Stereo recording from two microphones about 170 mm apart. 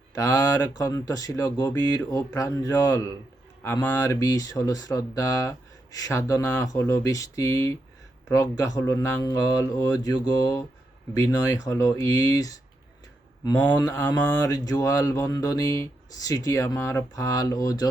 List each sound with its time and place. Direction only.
0.1 s speech: 20° left (ahead or behind)
13.7 s mantra: 10° left (ahead or behind)
14.3 s speech: 20° left (ahead or behind)